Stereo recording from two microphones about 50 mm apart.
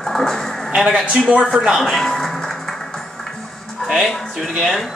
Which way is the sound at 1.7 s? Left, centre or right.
Centre.